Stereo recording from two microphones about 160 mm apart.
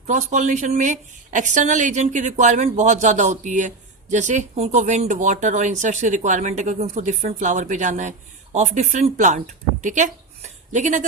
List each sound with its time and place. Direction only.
0.1 s a woman's voice: 50° right (ahead or behind)